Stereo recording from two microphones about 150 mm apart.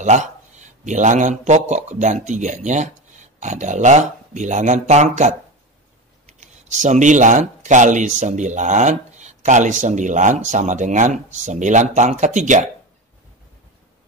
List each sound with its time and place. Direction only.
0.0 s a man's voice: 50° right (ahead or behind)